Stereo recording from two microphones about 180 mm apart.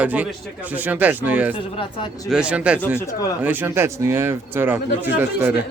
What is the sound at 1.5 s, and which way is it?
Speech, 30° left (ahead or behind).